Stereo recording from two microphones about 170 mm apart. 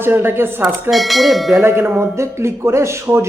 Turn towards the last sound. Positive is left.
turn(degrees=-15)  # may be behind; listen again after turning